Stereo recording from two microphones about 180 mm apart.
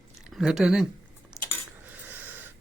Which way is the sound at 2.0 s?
10° right (ahead or behind).